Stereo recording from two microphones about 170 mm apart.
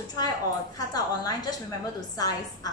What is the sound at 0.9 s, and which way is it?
Speech, 20° left (ahead or behind).